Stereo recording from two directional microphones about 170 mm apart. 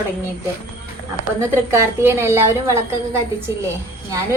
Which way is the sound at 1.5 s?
15° right (ahead or behind).